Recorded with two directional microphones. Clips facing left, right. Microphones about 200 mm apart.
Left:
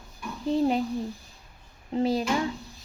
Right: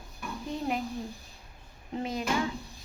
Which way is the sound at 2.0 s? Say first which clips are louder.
Left 9 dB; 30° left (ahead or behind).